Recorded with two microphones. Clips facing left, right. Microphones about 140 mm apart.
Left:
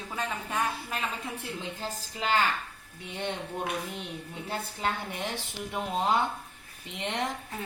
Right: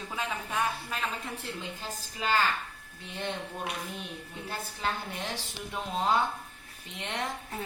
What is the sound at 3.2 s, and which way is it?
A woman's voice, 20° left (ahead or behind).